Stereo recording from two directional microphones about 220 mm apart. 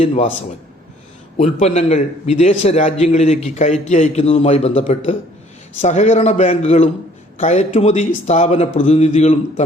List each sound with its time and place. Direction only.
0.0 s a man's voice: 30° left (ahead or behind)
1.4 s a man's voice: 30° left (ahead or behind)